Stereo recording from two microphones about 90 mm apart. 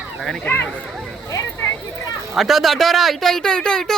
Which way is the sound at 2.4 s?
Centre (ahead or behind).